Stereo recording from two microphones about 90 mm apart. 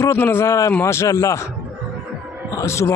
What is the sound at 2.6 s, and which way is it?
Speech, 30° left (ahead or behind).